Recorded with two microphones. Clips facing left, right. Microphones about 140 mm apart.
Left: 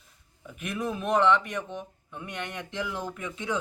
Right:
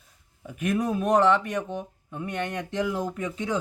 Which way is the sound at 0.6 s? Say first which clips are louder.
Right 6 dB; 45° right (ahead or behind).